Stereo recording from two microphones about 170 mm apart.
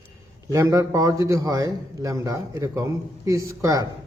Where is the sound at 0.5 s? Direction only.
15° right (ahead or behind).